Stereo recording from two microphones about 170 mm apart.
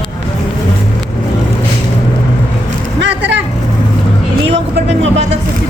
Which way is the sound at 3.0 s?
90° right.